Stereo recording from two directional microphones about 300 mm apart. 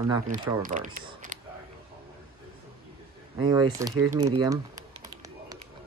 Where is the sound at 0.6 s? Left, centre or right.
Right.